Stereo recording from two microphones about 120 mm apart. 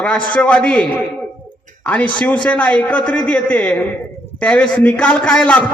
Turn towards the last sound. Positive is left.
turn(degrees=10)  # may be behind; listen again after turning